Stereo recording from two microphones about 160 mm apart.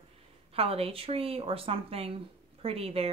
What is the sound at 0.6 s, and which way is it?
Speech, 35° right (ahead or behind).